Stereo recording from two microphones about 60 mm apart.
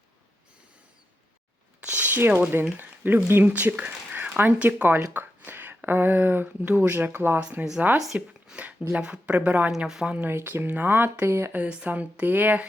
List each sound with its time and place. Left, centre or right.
1.8 s a sound: right
2.7 s speech: right
3.5 s speech: right
7.3 s speech: right
7.9 s speech: centre
9.7 s speech: centre
10.1 s speech: right
11.5 s speech: right